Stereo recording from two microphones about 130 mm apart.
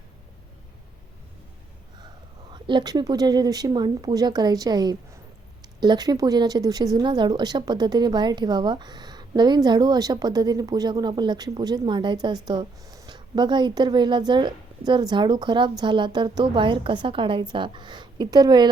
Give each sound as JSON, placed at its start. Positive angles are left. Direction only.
{"t": 2.5, "sound": "speech", "side_deg": -35}